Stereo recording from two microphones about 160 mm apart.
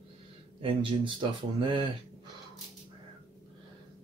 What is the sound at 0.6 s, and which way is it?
Speech, 30° right (ahead or behind).